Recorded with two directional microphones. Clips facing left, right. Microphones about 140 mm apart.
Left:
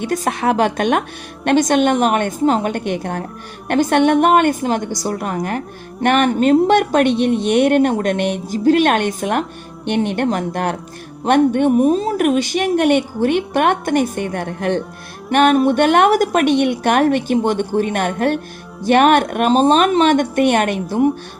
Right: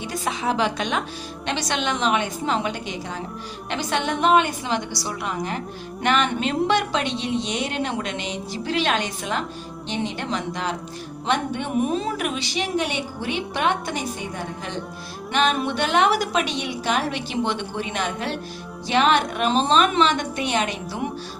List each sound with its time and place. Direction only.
0.0 s a woman's voice: 55° left (ahead or behind)
8.5 s a woman's voice: 45° left (ahead or behind)